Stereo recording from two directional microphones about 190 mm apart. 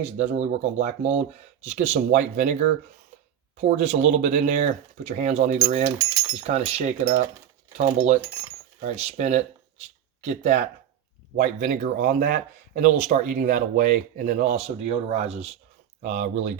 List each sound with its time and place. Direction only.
0.0 s speech: 35° right (ahead or behind)
14.8 s speech: 35° right (ahead or behind)
16.0 s speech: 45° right (ahead or behind)